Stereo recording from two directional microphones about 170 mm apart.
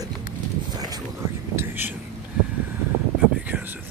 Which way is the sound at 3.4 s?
10° right (ahead or behind).